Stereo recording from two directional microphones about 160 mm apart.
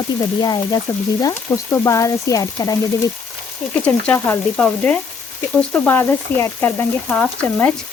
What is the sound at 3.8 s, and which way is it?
Speech, 10° left (ahead or behind).